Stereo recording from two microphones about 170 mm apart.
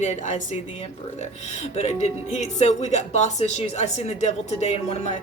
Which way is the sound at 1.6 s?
40° left (ahead or behind).